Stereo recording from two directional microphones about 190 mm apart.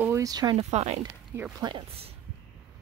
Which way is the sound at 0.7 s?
35° right (ahead or behind).